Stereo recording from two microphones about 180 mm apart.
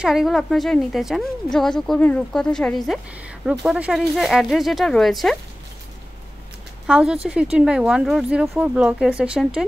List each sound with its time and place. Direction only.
0.0 s a woman's voice: centre (ahead or behind)
6.9 s a woman's voice: 5° right (ahead or behind)